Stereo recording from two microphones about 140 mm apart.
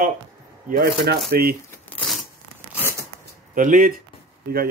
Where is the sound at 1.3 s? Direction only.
90° right.